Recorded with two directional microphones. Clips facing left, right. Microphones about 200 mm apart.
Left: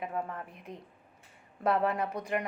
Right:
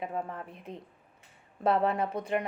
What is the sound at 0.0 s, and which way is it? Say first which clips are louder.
A woman's voice: right 1 dB; 25° right (ahead or behind).